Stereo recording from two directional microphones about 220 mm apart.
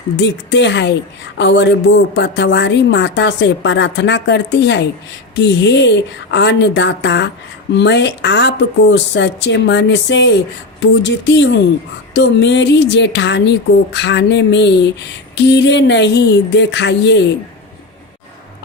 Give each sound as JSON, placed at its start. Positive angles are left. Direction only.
{"t": 0.2, "sound": "a woman's voice", "side_deg": 55}